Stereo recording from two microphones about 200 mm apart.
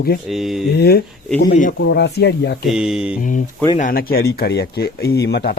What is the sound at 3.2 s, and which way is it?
Speech, 40° left (ahead or behind).